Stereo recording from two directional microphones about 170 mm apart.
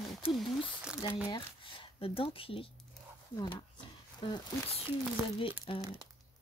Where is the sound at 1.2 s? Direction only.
30° left (ahead or behind).